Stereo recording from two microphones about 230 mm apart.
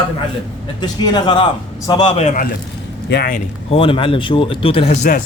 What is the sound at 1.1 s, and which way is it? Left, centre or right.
A man's voice, left.